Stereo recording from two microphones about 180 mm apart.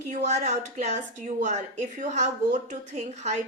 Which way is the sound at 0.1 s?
40° right (ahead or behind).